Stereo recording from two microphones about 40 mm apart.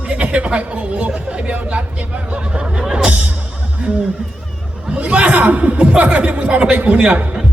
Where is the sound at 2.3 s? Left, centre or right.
Right.